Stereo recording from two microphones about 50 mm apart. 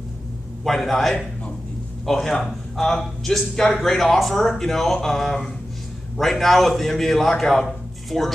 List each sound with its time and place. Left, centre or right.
0.7 s a man's voice: centre